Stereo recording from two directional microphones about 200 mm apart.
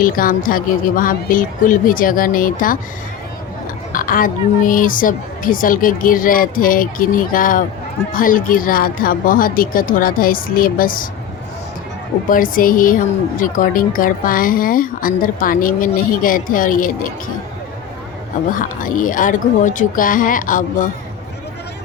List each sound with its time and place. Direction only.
0.0 s a woman's voice: 45° left (ahead or behind)
3.9 s a woman's voice: 45° left (ahead or behind)
12.3 s a woman's voice: 45° left (ahead or behind)
18.5 s speech: 40° left (ahead or behind)